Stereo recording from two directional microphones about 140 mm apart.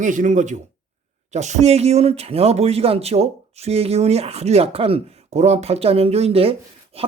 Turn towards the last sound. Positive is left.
turn(degrees=-45)  # may be behind; listen again after turning